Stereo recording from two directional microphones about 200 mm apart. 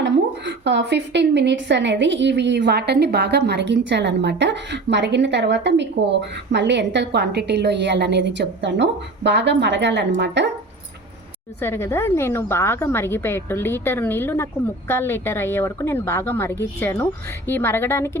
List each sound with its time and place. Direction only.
0.0 s a woman's voice: 60° right (ahead or behind)
11.6 s speech: 10° left (ahead or behind)